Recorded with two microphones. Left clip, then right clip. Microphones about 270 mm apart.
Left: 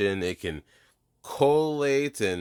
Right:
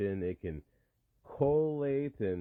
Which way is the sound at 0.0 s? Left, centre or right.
Centre.